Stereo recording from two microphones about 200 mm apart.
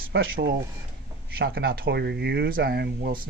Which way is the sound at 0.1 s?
50° right (ahead or behind).